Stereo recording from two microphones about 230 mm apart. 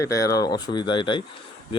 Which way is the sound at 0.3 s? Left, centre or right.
Centre.